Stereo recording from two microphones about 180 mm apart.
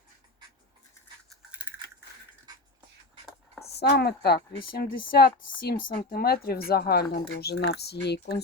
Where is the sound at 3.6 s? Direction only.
65° left (ahead or behind).